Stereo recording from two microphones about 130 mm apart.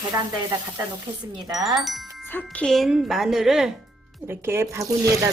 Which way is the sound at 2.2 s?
15° left (ahead or behind).